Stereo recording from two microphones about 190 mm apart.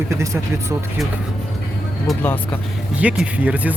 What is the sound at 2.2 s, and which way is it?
Speech, 10° left (ahead or behind).